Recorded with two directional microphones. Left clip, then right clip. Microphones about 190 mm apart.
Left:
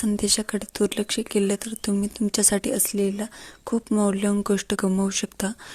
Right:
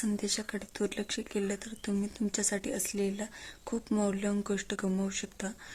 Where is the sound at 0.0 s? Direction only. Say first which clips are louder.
Left 10 dB; 30° left (ahead or behind).